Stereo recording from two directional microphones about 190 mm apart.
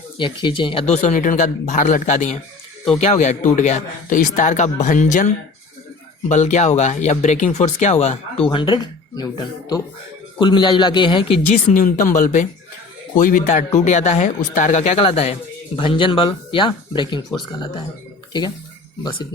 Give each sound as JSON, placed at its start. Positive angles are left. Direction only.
{"t": 0.2, "sound": "a woman's voice", "side_deg": 25}
{"t": 1.0, "sound": "speech", "side_deg": 40}
{"t": 8.4, "sound": "speech", "side_deg": 25}
{"t": 10.4, "sound": "a woman's voice", "side_deg": 25}
{"t": 11.5, "sound": "a woman's voice", "side_deg": 45}